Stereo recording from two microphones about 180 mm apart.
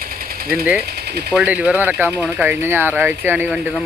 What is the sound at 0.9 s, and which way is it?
Speech, 65° right (ahead or behind).